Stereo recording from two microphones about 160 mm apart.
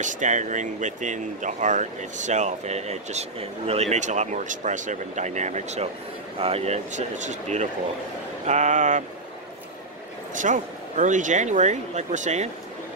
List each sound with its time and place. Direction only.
0.0 s speech: 50° right (ahead or behind)
10.3 s speech: 50° right (ahead or behind)